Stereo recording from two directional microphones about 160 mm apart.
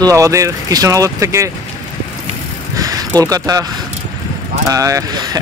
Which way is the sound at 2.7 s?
25° right (ahead or behind).